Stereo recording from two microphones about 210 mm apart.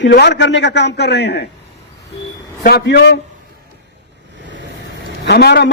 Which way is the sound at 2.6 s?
50° left (ahead or behind).